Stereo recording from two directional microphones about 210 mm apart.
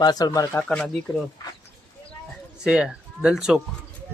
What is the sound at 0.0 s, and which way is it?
Speech, 20° left (ahead or behind).